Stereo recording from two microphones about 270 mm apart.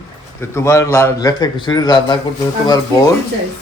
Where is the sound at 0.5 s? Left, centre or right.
Centre.